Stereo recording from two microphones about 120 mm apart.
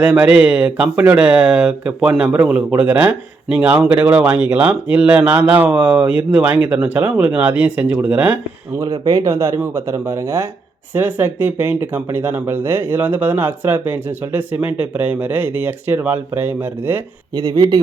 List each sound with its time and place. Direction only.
0.0 s speech: 10° right (ahead or behind)
8.8 s speech: 30° right (ahead or behind)
17.3 s speech: 30° right (ahead or behind)